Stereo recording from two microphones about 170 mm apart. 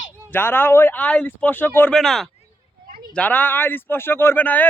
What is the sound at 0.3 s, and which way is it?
Speech, 10° left (ahead or behind).